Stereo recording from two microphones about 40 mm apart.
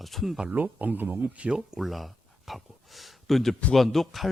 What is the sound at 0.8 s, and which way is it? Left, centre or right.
Speech, right.